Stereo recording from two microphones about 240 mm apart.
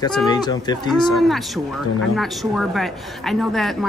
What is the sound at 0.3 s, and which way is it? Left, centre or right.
Speech, centre.